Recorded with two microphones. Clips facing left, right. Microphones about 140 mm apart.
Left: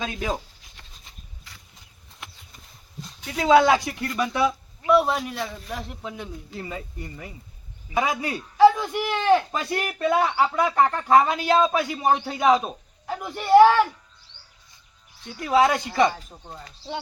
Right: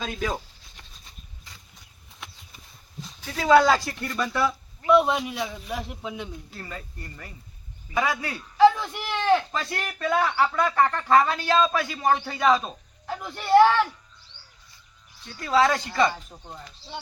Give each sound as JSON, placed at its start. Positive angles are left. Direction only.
{"t": 3.2, "sound": "speech", "side_deg": 15}
{"t": 3.9, "sound": "speech", "side_deg": 5}
{"t": 4.9, "sound": "a man's voice", "side_deg": 0}
{"t": 6.5, "sound": "speech", "side_deg": 15}
{"t": 8.5, "sound": "speech", "side_deg": 5}
{"t": 15.4, "sound": "a man's voice", "side_deg": 15}